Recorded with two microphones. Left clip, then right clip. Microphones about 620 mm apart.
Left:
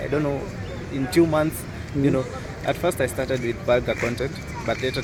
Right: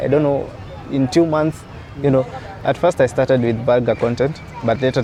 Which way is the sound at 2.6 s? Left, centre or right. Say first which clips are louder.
Right 8 dB; right.